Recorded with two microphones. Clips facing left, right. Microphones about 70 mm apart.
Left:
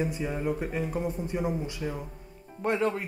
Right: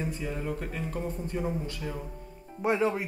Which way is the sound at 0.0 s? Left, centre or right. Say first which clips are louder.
Left 4 dB; centre.